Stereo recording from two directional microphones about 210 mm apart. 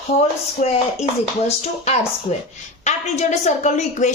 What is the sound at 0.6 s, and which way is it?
Speech, 35° left (ahead or behind).